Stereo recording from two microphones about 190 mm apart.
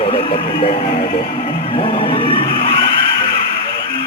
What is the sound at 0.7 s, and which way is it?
Music, 55° left (ahead or behind).